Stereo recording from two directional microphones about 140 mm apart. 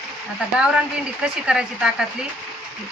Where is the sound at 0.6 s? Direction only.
5° right (ahead or behind).